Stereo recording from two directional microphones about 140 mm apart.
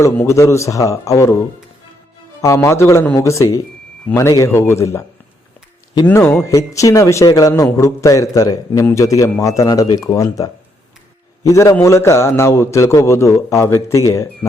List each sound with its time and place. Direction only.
0.0 s a man's voice: 20° left (ahead or behind)
2.4 s a man's voice: 20° left (ahead or behind)
6.1 s a man's voice: 15° left (ahead or behind)